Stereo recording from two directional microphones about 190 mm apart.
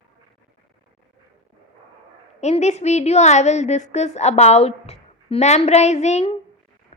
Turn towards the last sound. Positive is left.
turn(degrees=35)  # may be behind; listen again after turning